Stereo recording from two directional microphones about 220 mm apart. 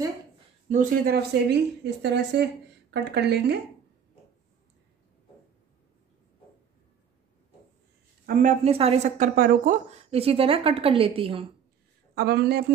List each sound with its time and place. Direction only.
0.7 s speech: 40° right (ahead or behind)
8.3 s speech: 35° right (ahead or behind)
12.2 s speech: 45° right (ahead or behind)